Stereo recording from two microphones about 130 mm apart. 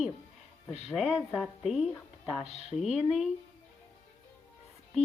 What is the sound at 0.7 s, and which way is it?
Music, 60° left (ahead or behind).